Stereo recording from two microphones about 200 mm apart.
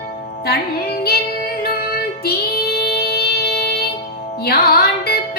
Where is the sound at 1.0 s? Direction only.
50° left (ahead or behind).